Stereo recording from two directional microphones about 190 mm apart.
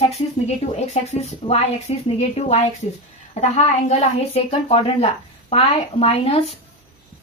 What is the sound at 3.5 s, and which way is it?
Speech, 30° left (ahead or behind).